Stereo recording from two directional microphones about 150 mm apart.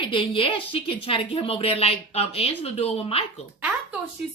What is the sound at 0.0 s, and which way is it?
A woman's voice, 35° left (ahead or behind).